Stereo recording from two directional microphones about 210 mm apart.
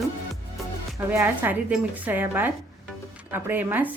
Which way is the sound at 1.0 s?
15° right (ahead or behind).